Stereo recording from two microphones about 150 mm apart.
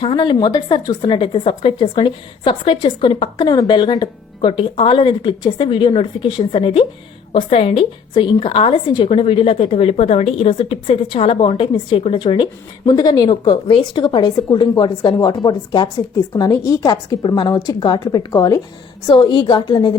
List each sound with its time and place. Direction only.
0.0 s a woman's voice: 35° left (ahead or behind)